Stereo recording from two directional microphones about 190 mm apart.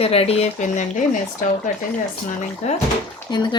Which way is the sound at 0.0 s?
30° left (ahead or behind).